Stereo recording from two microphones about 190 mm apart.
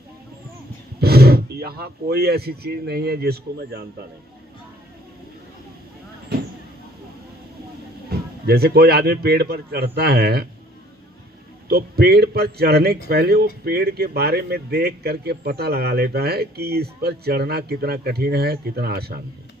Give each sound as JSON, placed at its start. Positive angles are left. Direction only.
{"t": 0.9, "sound": "speech", "side_deg": -55}
{"t": 8.4, "sound": "speech", "side_deg": -55}
{"t": 11.7, "sound": "speech", "side_deg": -55}